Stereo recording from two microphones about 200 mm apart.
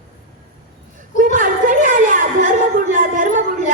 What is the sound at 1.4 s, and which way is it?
A woman's voice, 40° right (ahead or behind).